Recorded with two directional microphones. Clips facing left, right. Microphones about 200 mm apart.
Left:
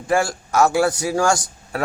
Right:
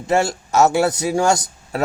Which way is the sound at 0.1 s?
25° right (ahead or behind).